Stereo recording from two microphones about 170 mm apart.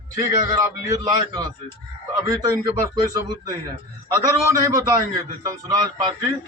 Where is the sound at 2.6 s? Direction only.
20° right (ahead or behind).